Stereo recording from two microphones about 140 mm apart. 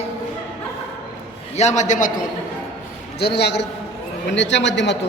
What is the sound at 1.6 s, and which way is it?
Speech, 55° left (ahead or behind).